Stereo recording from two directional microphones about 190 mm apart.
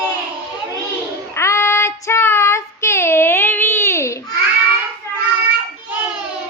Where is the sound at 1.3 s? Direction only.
15° left (ahead or behind).